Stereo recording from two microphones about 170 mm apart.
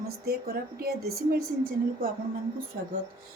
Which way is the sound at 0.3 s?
65° right (ahead or behind).